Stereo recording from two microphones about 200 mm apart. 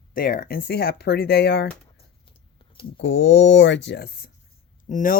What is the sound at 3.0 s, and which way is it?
Speech, 70° left (ahead or behind).